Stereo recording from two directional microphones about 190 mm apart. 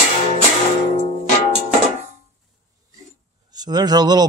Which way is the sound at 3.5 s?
20° right (ahead or behind).